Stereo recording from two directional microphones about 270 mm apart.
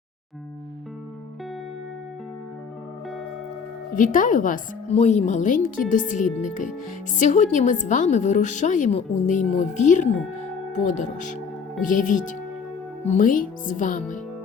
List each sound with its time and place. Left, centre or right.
3.9 s a woman's voice: left